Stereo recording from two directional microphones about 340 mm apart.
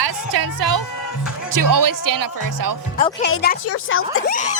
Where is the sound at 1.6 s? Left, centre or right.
Right.